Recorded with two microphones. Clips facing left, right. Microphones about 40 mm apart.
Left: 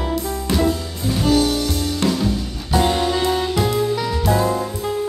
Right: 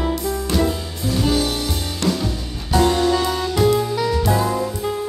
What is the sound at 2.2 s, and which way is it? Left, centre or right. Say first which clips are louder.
Music: left 4 dB; centre.